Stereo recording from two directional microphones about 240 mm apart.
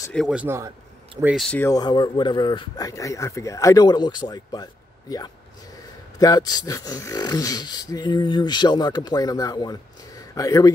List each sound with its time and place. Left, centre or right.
0.1 s a man's voice: centre
1.7 s speech: centre
6.1 s speech: centre